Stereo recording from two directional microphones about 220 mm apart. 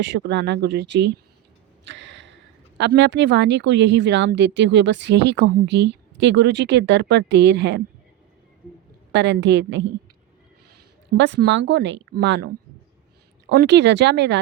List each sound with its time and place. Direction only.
0.0 s speech: 55° right (ahead or behind)
9.1 s speech: 55° right (ahead or behind)
11.2 s speech: 55° right (ahead or behind)
13.5 s speech: 55° right (ahead or behind)